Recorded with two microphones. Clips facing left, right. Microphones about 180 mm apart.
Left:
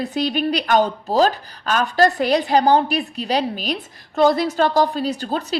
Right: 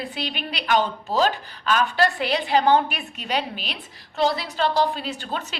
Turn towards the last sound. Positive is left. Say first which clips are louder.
# left 7 dB
turn(degrees=40)  # may be behind; listen again after turning